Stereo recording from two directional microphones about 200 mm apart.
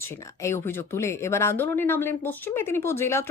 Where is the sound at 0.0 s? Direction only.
10° left (ahead or behind).